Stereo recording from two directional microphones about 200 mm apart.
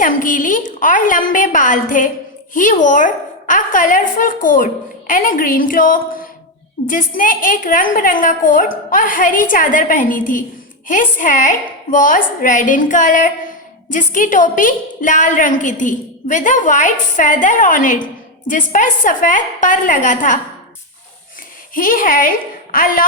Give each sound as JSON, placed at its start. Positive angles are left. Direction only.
{"t": 0.0, "sound": "a woman's voice", "side_deg": 40}
{"t": 21.8, "sound": "a woman's voice", "side_deg": 45}